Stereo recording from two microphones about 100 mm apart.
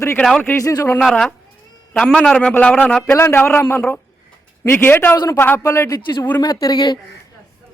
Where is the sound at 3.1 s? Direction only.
25° left (ahead or behind).